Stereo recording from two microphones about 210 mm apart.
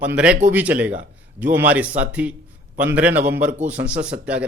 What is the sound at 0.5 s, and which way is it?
A man's voice, 5° right (ahead or behind).